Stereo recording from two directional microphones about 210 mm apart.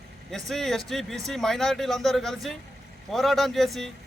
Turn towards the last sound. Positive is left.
turn(degrees=0)  # may be behind; listen again after turning